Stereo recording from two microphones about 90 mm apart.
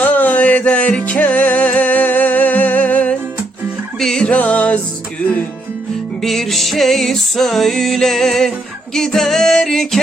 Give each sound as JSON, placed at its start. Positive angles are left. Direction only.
{"t": 0.0, "sound": "music", "side_deg": 20}
{"t": 6.2, "sound": "music", "side_deg": 5}